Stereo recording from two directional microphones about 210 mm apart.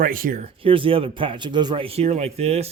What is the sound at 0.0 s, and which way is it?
Speech, 40° right (ahead or behind).